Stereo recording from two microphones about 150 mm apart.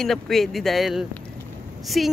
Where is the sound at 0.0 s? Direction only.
Centre (ahead or behind).